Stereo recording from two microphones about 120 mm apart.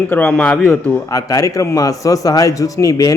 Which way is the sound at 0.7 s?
30° left (ahead or behind).